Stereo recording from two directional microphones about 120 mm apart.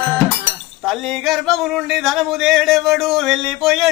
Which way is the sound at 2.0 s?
Centre (ahead or behind).